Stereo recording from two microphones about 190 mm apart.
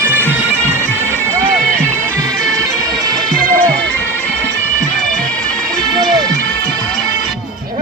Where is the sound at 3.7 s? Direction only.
5° left (ahead or behind).